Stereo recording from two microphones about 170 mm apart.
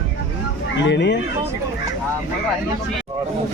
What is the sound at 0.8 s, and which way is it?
Speech, 90° left.